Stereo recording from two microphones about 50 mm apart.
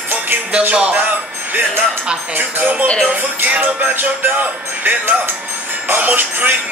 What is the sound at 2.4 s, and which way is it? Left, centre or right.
Music, right.